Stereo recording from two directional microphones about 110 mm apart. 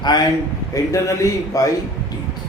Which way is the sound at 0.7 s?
30° left (ahead or behind).